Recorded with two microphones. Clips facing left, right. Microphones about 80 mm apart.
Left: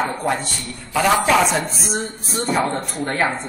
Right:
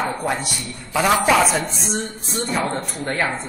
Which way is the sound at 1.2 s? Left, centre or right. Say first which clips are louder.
Even; centre.